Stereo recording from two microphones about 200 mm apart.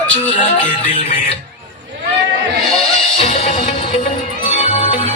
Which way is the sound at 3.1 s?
35° left (ahead or behind).